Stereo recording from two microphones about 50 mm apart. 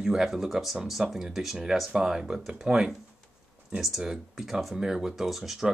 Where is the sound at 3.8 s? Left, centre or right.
Centre.